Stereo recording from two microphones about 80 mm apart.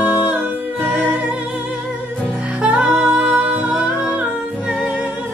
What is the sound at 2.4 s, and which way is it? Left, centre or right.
Music, centre.